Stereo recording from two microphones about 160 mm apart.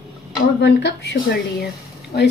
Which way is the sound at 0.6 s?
90° left.